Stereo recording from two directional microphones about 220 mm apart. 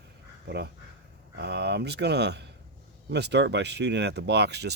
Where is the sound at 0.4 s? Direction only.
50° right (ahead or behind).